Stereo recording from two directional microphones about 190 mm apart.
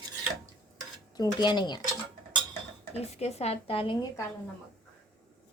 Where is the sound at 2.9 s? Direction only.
35° left (ahead or behind).